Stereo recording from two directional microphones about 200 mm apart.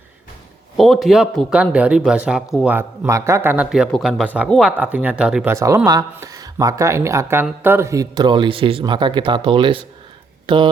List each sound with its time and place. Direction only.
0.8 s speech: centre (ahead or behind)
5.5 s speech: 15° right (ahead or behind)